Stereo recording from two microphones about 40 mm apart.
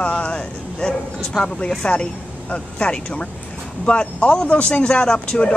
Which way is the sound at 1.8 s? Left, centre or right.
Left.